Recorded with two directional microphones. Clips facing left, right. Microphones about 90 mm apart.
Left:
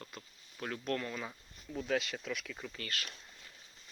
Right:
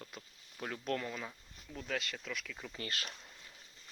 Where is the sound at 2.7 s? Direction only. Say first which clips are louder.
Right 3 dB; 25° right (ahead or behind).